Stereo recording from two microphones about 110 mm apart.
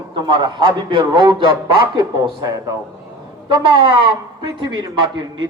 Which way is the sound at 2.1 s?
35° right (ahead or behind).